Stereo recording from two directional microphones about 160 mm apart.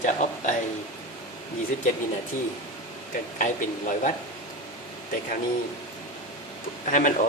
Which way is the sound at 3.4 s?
55° left (ahead or behind).